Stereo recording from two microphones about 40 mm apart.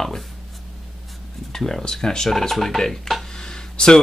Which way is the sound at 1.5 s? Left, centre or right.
Centre.